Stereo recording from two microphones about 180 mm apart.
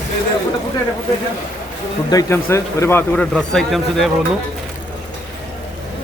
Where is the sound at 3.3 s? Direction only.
Centre (ahead or behind).